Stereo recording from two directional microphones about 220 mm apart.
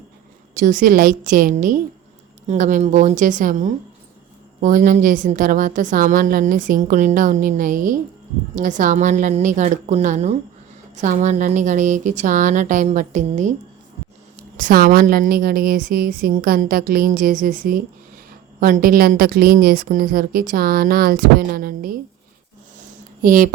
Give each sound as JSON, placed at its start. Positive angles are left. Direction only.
{"t": 0.5, "sound": "a woman's voice", "side_deg": -35}
{"t": 14.5, "sound": "a woman's voice", "side_deg": -40}
{"t": 23.2, "sound": "a woman's voice", "side_deg": -40}